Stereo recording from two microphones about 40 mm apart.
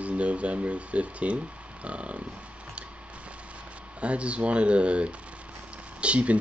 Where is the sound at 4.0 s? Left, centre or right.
Right.